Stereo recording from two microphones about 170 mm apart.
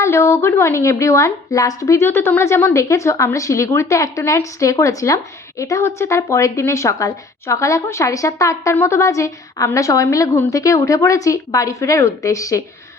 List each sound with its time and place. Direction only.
0.0 s a woman's voice: 15° left (ahead or behind)